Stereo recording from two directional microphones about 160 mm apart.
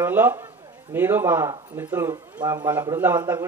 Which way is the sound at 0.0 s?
10° right (ahead or behind).